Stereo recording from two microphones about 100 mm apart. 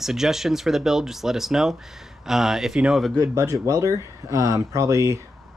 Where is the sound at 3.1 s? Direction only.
30° right (ahead or behind).